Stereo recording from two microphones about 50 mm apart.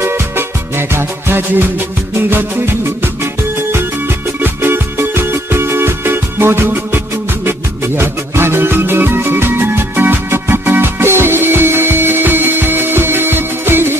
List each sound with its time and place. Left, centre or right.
0.0 s music: right
4.4 s music: right